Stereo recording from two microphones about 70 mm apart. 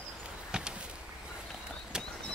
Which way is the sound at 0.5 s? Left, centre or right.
Centre.